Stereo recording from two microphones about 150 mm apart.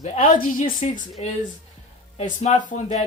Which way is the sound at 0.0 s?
55° left (ahead or behind).